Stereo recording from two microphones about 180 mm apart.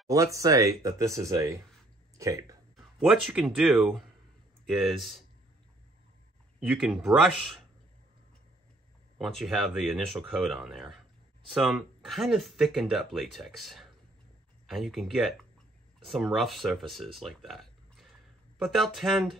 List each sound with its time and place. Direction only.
0.1 s speech: 20° right (ahead or behind)
2.7 s speech: centre (ahead or behind)
6.6 s speech: centre (ahead or behind)
9.2 s speech: centre (ahead or behind)